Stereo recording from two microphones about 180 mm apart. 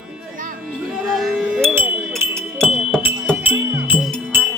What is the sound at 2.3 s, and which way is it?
Music, 5° left (ahead or behind).